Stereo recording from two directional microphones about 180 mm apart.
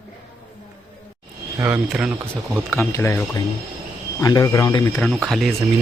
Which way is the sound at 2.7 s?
10° left (ahead or behind).